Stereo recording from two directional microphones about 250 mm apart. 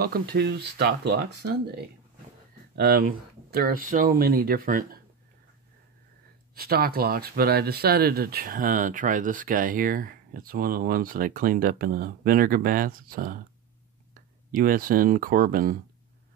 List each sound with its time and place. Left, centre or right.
0.0 s speech: right
6.5 s speech: right
14.5 s speech: right